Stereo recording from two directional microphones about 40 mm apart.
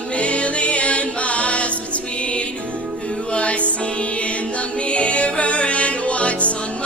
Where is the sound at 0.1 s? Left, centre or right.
Left.